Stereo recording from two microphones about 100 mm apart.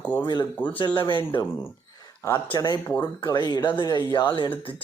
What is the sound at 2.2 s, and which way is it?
Speech, 30° left (ahead or behind).